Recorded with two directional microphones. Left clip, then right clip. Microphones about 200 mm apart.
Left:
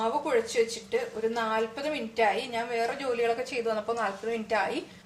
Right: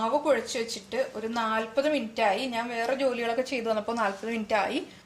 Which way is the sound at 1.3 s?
35° right (ahead or behind).